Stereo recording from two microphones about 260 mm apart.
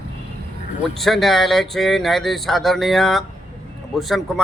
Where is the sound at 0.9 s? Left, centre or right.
Centre.